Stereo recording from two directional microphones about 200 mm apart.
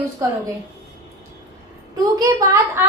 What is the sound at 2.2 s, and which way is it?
Speech, 15° right (ahead or behind).